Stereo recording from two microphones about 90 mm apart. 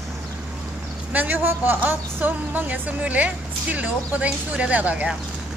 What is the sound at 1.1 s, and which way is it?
A woman's voice, 20° right (ahead or behind).